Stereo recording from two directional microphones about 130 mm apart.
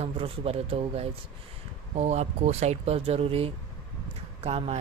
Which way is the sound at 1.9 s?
60° right (ahead or behind).